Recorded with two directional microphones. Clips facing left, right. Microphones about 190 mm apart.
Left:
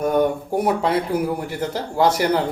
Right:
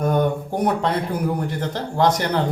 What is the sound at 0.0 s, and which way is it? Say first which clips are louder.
Speech: left 1 dB; 10° left (ahead or behind).